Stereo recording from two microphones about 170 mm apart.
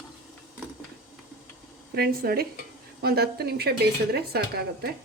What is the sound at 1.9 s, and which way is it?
A woman's voice, 60° right (ahead or behind).